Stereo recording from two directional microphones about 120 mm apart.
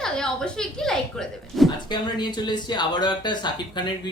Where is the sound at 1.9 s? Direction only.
35° left (ahead or behind).